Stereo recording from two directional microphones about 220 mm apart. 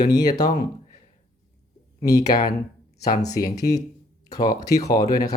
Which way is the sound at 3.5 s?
15° left (ahead or behind).